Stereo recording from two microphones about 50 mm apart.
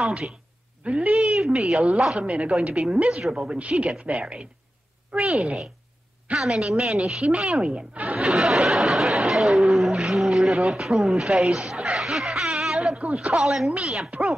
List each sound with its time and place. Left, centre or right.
0.8 s speech: right
1.3 s speech: centre
2.2 s speech: right
2.7 s speech: centre
6.3 s speech: centre
7.6 s speech: right
8.1 s a sound: centre
12.9 s a man's voice: right
13.3 s speech: centre
13.7 s speech: centre